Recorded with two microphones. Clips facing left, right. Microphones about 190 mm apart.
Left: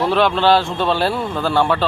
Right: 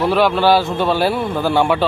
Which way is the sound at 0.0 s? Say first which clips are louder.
Right 1 dB; 5° right (ahead or behind).